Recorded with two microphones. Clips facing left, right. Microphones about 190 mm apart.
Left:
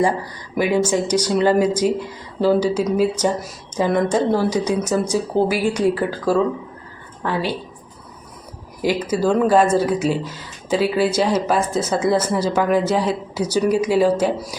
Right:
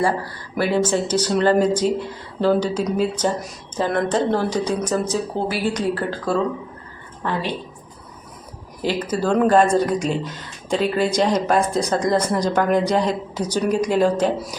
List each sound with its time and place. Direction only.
0.0 s speech: 15° left (ahead or behind)
8.8 s speech: 10° left (ahead or behind)